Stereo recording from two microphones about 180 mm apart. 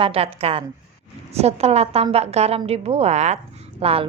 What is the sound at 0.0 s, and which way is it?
A woman's voice, 30° right (ahead or behind).